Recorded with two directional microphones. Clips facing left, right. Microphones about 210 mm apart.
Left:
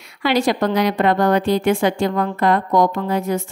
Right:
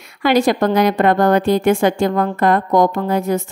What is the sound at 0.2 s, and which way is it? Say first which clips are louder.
A woman's voice: right 3 dB; 50° right (ahead or behind).